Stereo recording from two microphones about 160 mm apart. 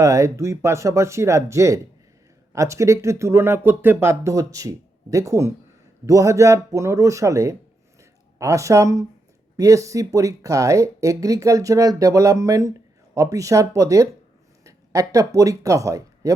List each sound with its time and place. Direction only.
0.0 s speech: 20° right (ahead or behind)